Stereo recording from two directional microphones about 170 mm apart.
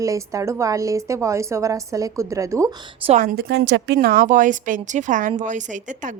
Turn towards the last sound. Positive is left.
turn(degrees=-50)  # may be behind; listen again after turning